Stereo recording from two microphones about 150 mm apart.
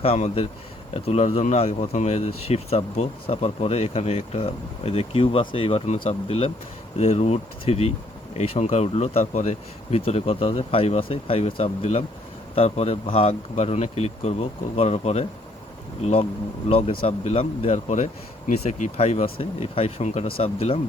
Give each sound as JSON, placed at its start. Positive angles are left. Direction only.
{"t": 0.0, "sound": "speech", "side_deg": 40}
{"t": 16.6, "sound": "speech", "side_deg": 40}